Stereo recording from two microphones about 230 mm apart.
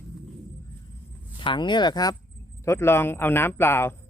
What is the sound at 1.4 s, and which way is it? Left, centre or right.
A man's voice, left.